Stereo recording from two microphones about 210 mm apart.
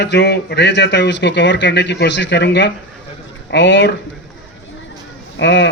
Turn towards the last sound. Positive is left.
turn(degrees=55)  # may be behind; listen again after turning